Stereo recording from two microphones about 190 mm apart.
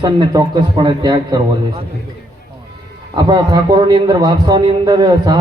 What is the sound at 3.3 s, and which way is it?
A man's voice, 20° right (ahead or behind).